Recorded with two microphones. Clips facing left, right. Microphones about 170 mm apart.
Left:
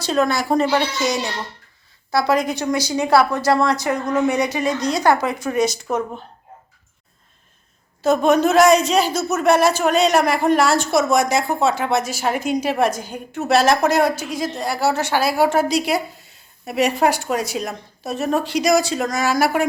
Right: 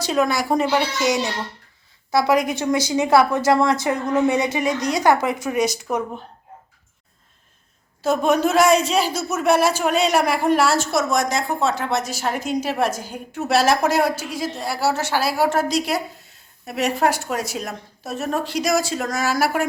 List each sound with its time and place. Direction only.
0.0 s a woman's voice: 15° right (ahead or behind)
1.0 s a woman's voice: 20° right (ahead or behind)
8.0 s a woman's voice: 5° right (ahead or behind)